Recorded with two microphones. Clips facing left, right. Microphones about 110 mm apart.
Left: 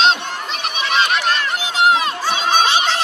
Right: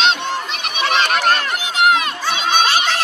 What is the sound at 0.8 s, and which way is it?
Goose, 45° right (ahead or behind).